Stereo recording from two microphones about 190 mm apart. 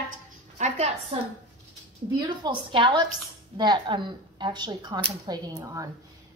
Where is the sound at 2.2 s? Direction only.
25° right (ahead or behind).